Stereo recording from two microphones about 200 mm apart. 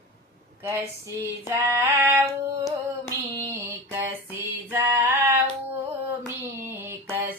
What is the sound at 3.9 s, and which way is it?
Female singing, 10° right (ahead or behind).